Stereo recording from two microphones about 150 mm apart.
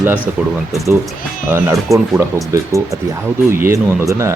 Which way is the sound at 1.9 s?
20° right (ahead or behind).